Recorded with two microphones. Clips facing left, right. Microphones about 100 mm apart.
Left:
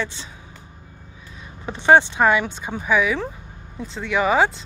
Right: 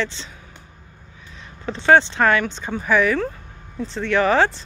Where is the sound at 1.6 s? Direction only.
20° left (ahead or behind).